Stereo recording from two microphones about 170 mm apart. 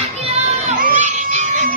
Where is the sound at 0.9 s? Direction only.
40° right (ahead or behind).